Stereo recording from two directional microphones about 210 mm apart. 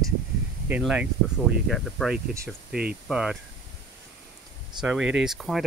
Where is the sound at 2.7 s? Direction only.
50° right (ahead or behind).